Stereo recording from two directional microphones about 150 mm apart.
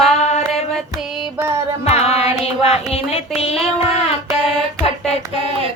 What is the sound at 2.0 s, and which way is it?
Music, 45° left (ahead or behind).